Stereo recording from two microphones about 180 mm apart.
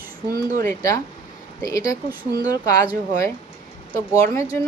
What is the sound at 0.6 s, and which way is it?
A woman's voice, 15° left (ahead or behind).